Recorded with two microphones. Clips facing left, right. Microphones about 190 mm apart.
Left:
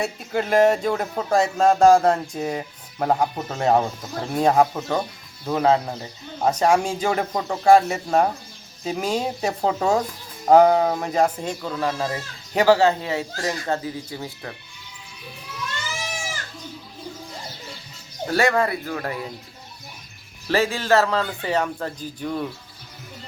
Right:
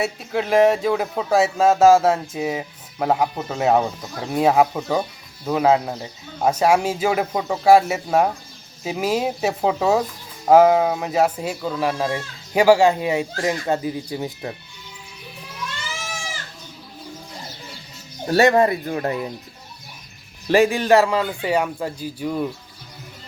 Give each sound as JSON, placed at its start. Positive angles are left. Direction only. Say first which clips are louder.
{"t": 0.0, "sound": "speech", "louder": "right 1 dB", "side_deg": 0}
{"t": 18.3, "sound": "speech", "louder": "right 5 dB", "side_deg": -20}
{"t": 20.5, "sound": "speech", "louder": "right 5 dB", "side_deg": -15}